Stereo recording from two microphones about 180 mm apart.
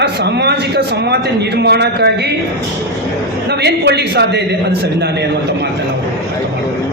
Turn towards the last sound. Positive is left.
turn(degrees=-65)  # may be behind; listen again after turning